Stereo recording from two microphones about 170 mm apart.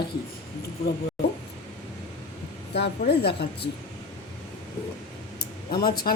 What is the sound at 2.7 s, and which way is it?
Speech, 75° left (ahead or behind).